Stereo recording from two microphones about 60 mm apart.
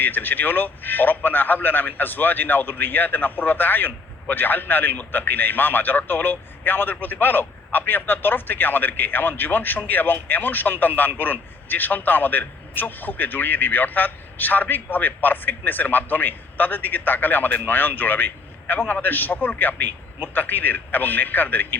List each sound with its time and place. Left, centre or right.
0.0 s speech: left